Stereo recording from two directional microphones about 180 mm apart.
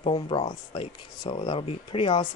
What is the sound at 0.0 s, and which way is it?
Speech, 30° left (ahead or behind).